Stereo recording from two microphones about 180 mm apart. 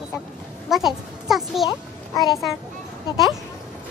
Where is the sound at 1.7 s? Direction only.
20° left (ahead or behind).